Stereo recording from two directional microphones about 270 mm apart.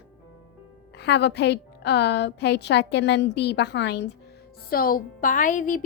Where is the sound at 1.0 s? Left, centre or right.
Left.